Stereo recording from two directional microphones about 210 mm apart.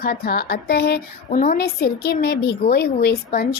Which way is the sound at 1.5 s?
50° left (ahead or behind).